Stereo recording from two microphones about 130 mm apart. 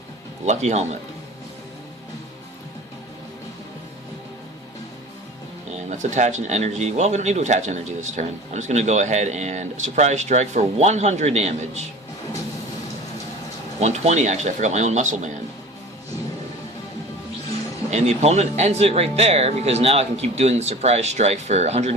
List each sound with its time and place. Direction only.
0.4 s speech: 60° right (ahead or behind)
5.7 s speech: 70° right (ahead or behind)
13.7 s speech: 55° right (ahead or behind)
17.9 s speech: 55° right (ahead or behind)